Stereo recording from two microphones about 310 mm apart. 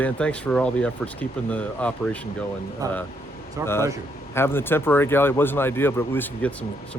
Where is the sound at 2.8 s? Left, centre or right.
Centre.